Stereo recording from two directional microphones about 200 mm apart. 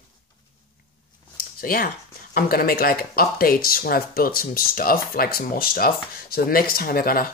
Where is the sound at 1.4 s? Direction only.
45° left (ahead or behind).